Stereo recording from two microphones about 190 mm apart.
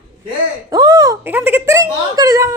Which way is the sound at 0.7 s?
20° right (ahead or behind).